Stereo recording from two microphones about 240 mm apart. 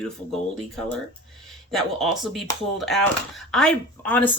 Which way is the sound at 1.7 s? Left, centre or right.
Centre.